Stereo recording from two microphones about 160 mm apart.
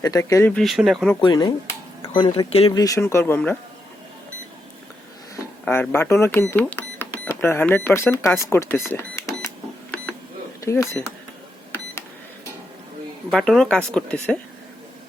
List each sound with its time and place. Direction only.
0.0 s speech: 20° left (ahead or behind)
0.5 s speech: centre (ahead or behind)
1.2 s speech: 30° left (ahead or behind)
2.7 s speech: 20° left (ahead or behind)
5.6 s speech: 10° left (ahead or behind)
10.6 s speech: 20° left (ahead or behind)
13.3 s speech: 5° left (ahead or behind)